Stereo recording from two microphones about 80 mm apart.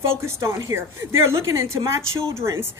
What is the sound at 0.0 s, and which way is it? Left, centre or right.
A woman's voice, right.